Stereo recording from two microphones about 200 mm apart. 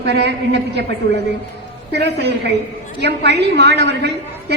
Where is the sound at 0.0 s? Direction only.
55° right (ahead or behind).